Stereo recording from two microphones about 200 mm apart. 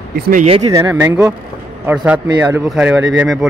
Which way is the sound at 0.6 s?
15° right (ahead or behind).